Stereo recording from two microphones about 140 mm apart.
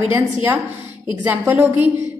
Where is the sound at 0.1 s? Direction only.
15° right (ahead or behind).